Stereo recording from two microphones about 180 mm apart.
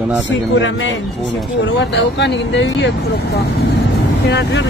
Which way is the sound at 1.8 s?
75° left (ahead or behind).